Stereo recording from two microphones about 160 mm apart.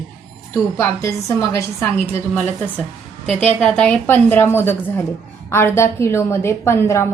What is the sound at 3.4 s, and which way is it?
Speech, 10° left (ahead or behind).